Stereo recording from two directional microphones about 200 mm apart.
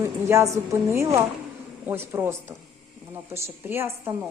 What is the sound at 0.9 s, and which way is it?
A woman's voice, 15° right (ahead or behind).